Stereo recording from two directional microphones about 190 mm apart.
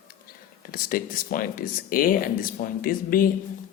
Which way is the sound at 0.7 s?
45° left (ahead or behind).